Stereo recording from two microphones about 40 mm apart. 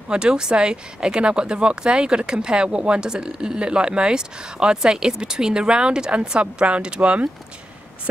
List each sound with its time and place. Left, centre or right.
0.1 s speech: right